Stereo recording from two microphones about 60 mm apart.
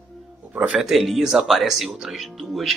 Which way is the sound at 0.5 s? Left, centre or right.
Centre.